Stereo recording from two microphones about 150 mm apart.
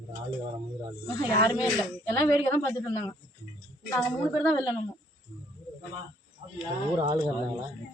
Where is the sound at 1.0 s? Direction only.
25° left (ahead or behind).